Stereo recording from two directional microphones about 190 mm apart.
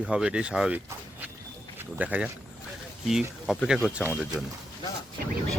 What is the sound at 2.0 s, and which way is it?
Speech, 5° right (ahead or behind).